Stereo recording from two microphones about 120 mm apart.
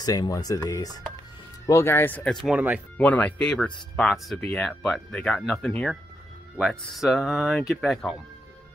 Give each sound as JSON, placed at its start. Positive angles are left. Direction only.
{"t": 0.0, "sound": "speech", "side_deg": 30}
{"t": 2.4, "sound": "speech", "side_deg": -10}
{"t": 3.0, "sound": "speech", "side_deg": 10}